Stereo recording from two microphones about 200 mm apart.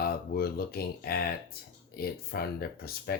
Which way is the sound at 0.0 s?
50° left (ahead or behind).